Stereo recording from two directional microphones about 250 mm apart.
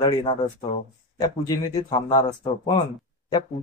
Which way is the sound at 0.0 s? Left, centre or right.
Left.